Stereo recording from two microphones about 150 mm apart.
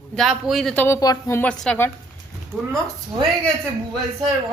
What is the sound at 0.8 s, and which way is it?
Speech, 20° left (ahead or behind).